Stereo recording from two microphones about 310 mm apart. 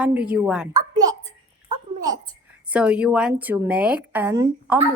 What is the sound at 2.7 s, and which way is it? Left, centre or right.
A woman's voice, centre.